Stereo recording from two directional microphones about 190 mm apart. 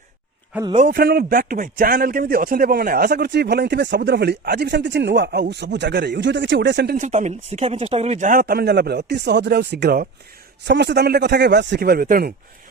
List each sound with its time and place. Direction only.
0.8 s a man's voice: 50° right (ahead or behind); by 6.9 s 65° right (ahead or behind)
6.9 s a man's voice: 40° right (ahead or behind)